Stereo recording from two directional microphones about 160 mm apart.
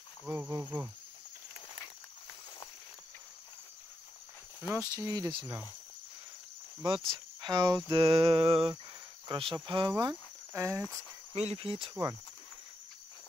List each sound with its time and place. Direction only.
0.3 s speech: 10° right (ahead or behind)
4.6 s speech: 20° right (ahead or behind)
7.4 s a sound: 25° right (ahead or behind)
9.3 s speech: 30° right (ahead or behind)
11.3 s a sound: 40° right (ahead or behind)
11.9 s speech: 20° right (ahead or behind)